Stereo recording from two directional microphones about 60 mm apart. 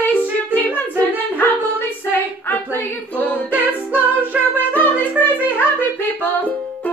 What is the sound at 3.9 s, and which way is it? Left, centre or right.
Music, right.